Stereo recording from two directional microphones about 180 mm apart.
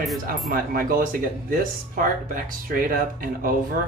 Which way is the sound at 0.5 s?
50° right (ahead or behind).